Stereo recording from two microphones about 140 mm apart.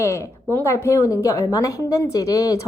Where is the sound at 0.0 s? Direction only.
20° left (ahead or behind).